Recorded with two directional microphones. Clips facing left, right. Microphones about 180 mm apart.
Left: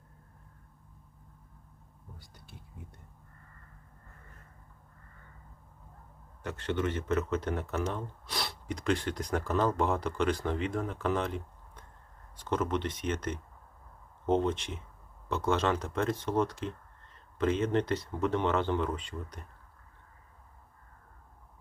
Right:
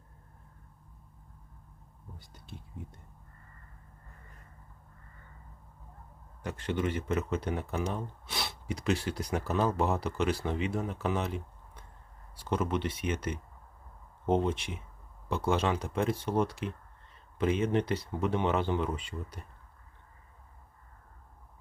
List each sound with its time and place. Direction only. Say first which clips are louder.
2.1 s speech: right 6 dB; 20° right (ahead or behind)
6.4 s speech: even; 10° right (ahead or behind)